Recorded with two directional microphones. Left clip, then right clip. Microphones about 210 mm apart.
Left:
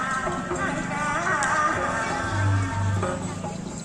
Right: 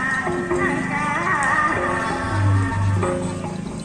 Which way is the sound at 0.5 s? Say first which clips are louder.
Right 6 dB; 55° left (ahead or behind).